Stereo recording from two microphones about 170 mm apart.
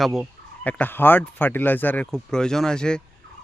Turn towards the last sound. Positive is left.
turn(degrees=5)  # may be behind; listen again after turning